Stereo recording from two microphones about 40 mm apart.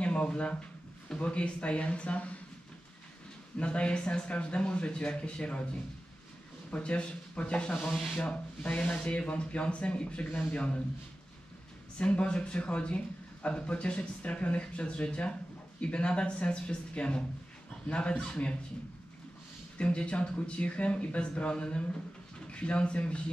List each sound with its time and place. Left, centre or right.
0.0 s speech: left
3.5 s speech: left
6.7 s speech: left
7.9 s speech: centre
8.3 s speech: left
8.9 s speech: left
12.0 s speech: left
19.8 s speech: left